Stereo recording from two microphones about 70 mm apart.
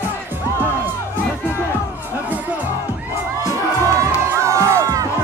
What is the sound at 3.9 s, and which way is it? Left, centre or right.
Music, right.